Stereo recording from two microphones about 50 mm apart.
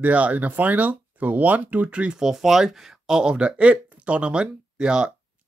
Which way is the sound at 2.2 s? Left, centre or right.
Centre.